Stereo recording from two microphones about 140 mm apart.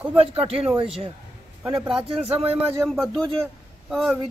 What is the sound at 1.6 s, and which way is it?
Speech, 5° right (ahead or behind).